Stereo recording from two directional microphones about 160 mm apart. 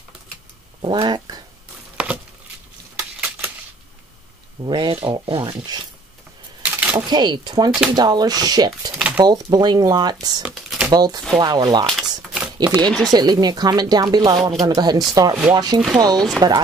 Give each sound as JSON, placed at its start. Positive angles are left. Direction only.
{"t": 0.9, "sound": "speech", "side_deg": -25}
{"t": 2.0, "sound": "a sound", "side_deg": -5}
{"t": 4.6, "sound": "speech", "side_deg": -30}
{"t": 6.6, "sound": "a sound", "side_deg": -10}
{"t": 7.1, "sound": "speech", "side_deg": -25}
{"t": 8.9, "sound": "speech", "side_deg": -5}
{"t": 9.2, "sound": "speech", "side_deg": -25}
{"t": 10.4, "sound": "typing", "side_deg": -5}
{"t": 10.9, "sound": "speech", "side_deg": -25}
{"t": 11.9, "sound": "typewriter", "side_deg": 0}
{"t": 12.5, "sound": "speech", "side_deg": -25}